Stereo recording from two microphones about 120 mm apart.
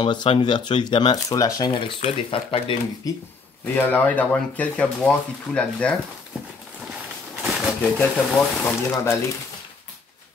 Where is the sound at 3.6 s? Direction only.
15° left (ahead or behind).